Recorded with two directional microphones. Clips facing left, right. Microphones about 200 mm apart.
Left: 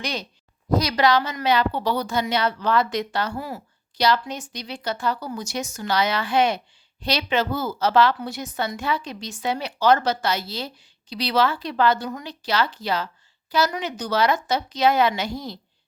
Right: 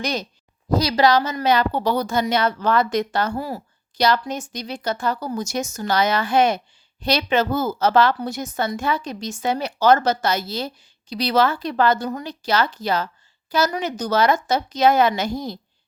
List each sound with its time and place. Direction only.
0.0 s a woman's voice: 45° right (ahead or behind)
0.8 s a woman's voice: 30° right (ahead or behind); by 15.5 s 45° right (ahead or behind)